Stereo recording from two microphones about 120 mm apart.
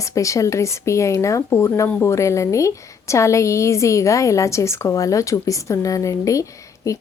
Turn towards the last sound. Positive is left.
turn(degrees=25)  # may be behind; listen again after turning